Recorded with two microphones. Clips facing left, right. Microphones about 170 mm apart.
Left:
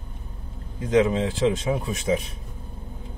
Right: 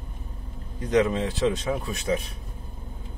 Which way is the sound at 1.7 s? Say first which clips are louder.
Left 2 dB; 20° left (ahead or behind).